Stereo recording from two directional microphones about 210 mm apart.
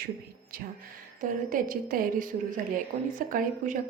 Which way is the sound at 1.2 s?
40° right (ahead or behind).